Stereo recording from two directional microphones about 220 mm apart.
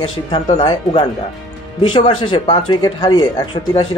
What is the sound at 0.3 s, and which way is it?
Speech, 20° left (ahead or behind).